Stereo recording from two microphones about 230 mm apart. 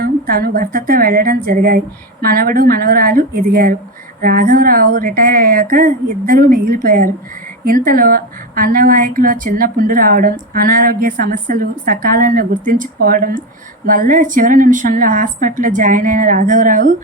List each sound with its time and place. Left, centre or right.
0.0 s a woman's voice: right